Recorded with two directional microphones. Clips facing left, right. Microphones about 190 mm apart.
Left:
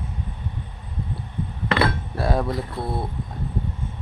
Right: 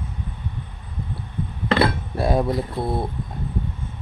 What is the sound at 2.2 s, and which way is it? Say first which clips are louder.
Speech: right 3 dB; 15° right (ahead or behind).